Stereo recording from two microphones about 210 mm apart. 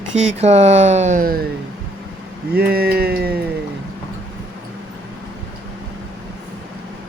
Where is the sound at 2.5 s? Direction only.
45° right (ahead or behind).